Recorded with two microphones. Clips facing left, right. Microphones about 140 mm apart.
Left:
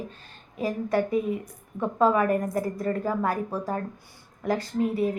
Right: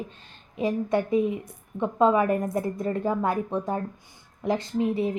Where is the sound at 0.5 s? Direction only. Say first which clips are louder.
Right 1 dB; 20° right (ahead or behind).